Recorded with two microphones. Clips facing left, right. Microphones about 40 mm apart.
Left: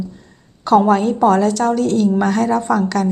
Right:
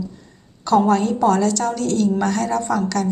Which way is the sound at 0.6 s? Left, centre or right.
Centre.